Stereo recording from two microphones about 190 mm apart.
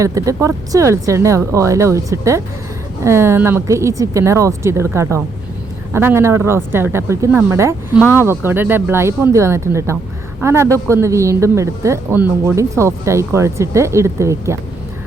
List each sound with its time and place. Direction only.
0.0 s speech: 15° right (ahead or behind)